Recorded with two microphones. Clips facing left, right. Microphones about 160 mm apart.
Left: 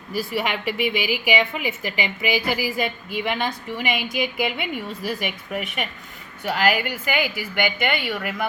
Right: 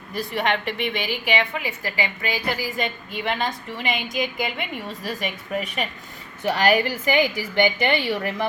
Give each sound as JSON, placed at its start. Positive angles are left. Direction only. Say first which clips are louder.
{"t": 0.1, "sound": "a woman's voice", "louder": "right 1 dB", "side_deg": 5}
{"t": 5.5, "sound": "a woman's voice", "louder": "right 3 dB", "side_deg": -35}